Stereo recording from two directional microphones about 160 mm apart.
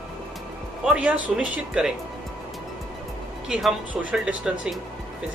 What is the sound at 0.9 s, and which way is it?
Speech, 5° right (ahead or behind).